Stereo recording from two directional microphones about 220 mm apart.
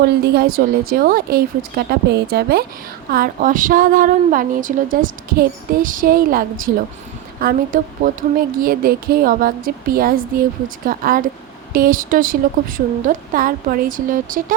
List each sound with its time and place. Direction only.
0.0 s a woman's voice: 45° right (ahead or behind)